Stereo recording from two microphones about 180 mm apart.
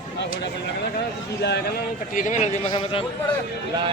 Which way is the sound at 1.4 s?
70° left (ahead or behind).